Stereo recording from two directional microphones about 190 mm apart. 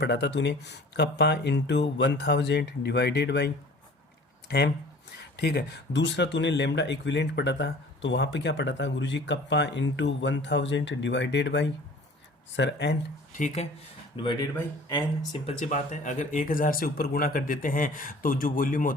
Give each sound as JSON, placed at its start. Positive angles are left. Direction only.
{"t": 0.0, "sound": "speech", "side_deg": 65}
{"t": 13.3, "sound": "speech", "side_deg": 40}
{"t": 14.2, "sound": "speech", "side_deg": 25}
{"t": 15.6, "sound": "speech", "side_deg": 40}